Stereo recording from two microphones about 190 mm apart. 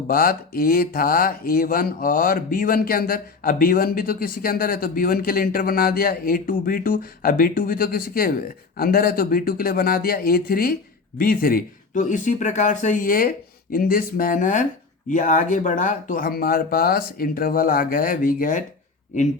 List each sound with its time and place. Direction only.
0.1 s speech: 50° left (ahead or behind)